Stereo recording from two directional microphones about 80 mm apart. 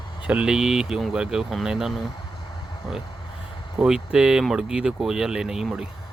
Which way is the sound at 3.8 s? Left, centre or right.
Centre.